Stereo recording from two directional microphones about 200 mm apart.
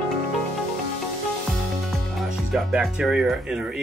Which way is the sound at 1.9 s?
Centre (ahead or behind).